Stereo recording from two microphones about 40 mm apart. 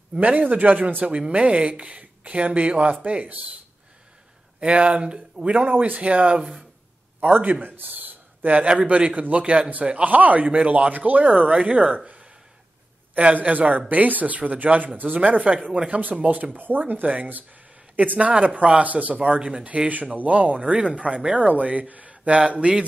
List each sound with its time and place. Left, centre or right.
0.2 s speech: right
4.6 s speech: right
7.6 s a sound: right
8.6 s speech: right
13.1 s speech: right
15.2 s speech: right
15.9 s speech: right
20.2 s speech: right